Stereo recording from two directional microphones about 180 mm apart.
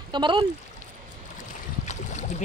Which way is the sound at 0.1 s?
25° right (ahead or behind).